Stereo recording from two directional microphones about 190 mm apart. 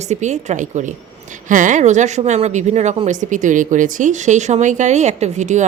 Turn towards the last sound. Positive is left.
turn(degrees=-40)  # may be behind; listen again after turning